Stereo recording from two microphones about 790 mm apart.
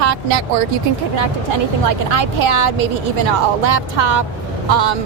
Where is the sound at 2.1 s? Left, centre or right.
Right.